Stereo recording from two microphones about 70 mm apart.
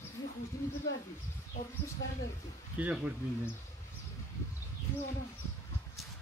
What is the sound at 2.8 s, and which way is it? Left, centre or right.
Speech, right.